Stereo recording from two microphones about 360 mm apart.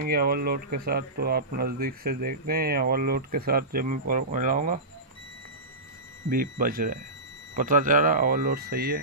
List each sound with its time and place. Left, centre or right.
0.0 s speech: right
6.2 s speech: right